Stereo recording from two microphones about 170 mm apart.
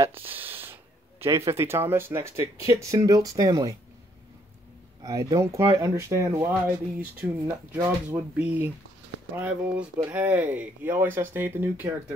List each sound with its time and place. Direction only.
0.2 s a sound: 10° right (ahead or behind)
1.2 s speech: 15° right (ahead or behind)
5.0 s speech: 20° right (ahead or behind)